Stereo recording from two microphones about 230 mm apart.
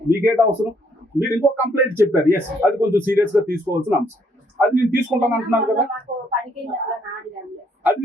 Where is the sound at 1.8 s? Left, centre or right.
Centre.